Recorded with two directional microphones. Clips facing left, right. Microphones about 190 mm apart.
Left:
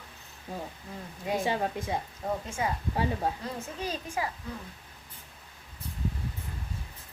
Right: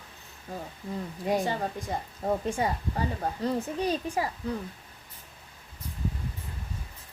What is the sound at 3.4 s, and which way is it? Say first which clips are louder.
Speech: right 7 dB; 35° right (ahead or behind).